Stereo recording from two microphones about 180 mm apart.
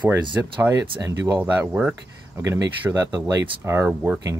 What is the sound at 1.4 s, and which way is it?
Speech, 10° right (ahead or behind).